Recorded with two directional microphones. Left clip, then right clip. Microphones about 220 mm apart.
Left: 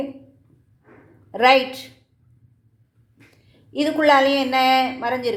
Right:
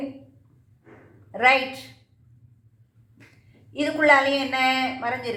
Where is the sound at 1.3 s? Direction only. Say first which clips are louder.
Left 4 dB; 45° left (ahead or behind).